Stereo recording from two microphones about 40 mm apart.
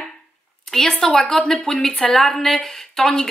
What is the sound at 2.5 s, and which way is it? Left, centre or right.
Speech, centre.